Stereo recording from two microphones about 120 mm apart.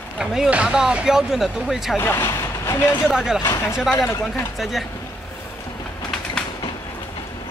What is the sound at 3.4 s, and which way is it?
Speech, 25° left (ahead or behind).